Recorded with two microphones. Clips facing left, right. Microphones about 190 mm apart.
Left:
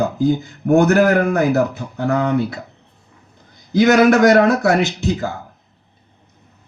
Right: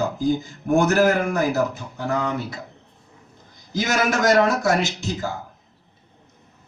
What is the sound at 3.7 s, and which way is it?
Speech, 60° left (ahead or behind).